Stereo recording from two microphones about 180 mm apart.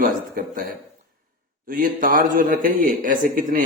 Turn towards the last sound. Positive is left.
turn(degrees=-50)  # may be behind; listen again after turning